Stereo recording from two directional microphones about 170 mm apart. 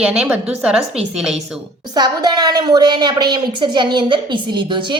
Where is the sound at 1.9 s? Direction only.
25° right (ahead or behind).